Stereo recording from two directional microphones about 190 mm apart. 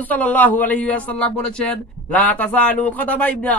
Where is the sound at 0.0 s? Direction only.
10° left (ahead or behind).